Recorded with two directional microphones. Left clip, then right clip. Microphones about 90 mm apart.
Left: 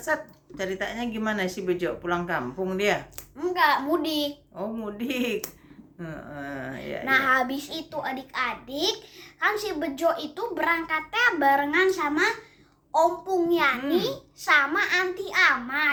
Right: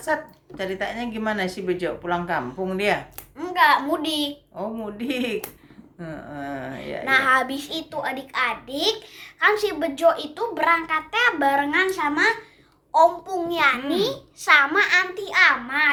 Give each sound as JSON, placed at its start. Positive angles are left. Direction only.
{"t": 0.0, "sound": "a woman's voice", "side_deg": 10}
{"t": 3.3, "sound": "a child's voice", "side_deg": -35}
{"t": 4.5, "sound": "a woman's voice", "side_deg": 15}
{"t": 7.0, "sound": "a child's voice", "side_deg": -35}